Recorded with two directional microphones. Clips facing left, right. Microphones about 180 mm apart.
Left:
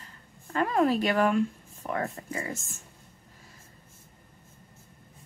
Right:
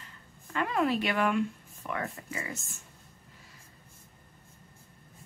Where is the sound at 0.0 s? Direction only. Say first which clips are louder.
Left 2 dB; 40° left (ahead or behind).